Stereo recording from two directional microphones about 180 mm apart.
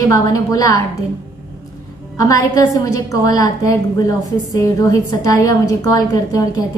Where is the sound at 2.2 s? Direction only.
20° left (ahead or behind).